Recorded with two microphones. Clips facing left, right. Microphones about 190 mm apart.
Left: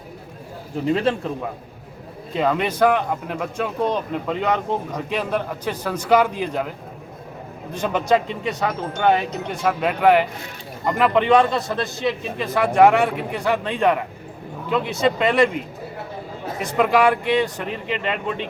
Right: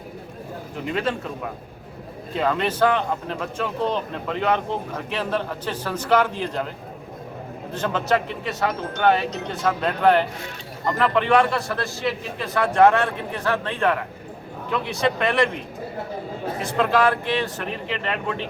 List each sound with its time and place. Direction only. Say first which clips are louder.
2.3 s speech: left 2 dB; 15° left (ahead or behind)
7.7 s speech: left 3 dB; 15° left (ahead or behind)
15.0 s speech: left 3 dB; 20° left (ahead or behind)
16.6 s speech: left 3 dB; 15° left (ahead or behind)